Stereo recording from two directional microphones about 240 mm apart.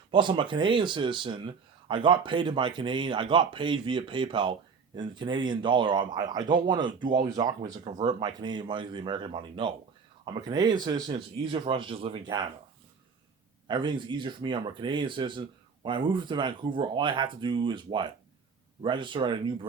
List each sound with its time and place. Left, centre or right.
0.1 s speech: centre
13.7 s speech: centre